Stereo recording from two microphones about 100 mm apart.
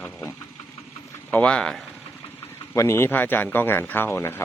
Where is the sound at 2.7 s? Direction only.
25° left (ahead or behind).